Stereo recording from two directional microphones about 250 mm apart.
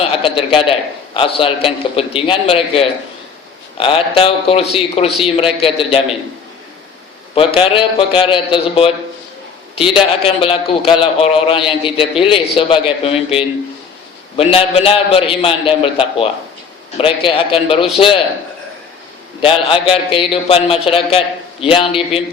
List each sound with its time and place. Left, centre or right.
0.0 s a man's voice: left
7.3 s a man's voice: left
19.4 s a man's voice: left